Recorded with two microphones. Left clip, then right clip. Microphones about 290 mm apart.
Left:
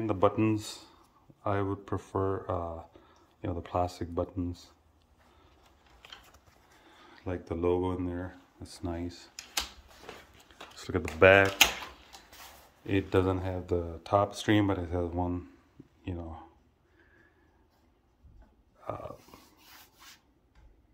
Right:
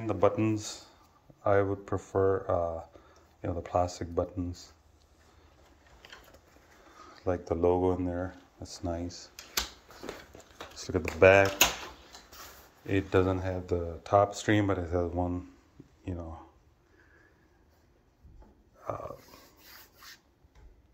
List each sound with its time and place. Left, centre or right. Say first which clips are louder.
0.0 s speech: even; centre
7.0 s speech: right 6 dB; centre
9.0 s speech: even; left
10.8 s speech: even; centre
12.8 s speech: right 1 dB; centre
18.9 s a sound: right 2 dB; centre